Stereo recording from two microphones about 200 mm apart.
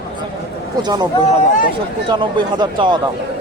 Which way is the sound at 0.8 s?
20° right (ahead or behind).